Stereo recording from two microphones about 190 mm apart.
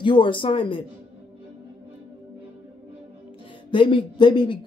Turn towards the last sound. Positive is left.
turn(degrees=25)  # may be behind; listen again after turning